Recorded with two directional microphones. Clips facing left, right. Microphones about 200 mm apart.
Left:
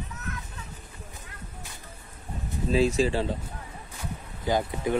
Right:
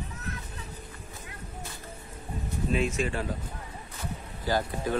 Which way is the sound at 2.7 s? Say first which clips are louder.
Left 6 dB; 30° left (ahead or behind).